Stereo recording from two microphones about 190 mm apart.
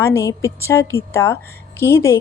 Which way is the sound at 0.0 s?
15° left (ahead or behind).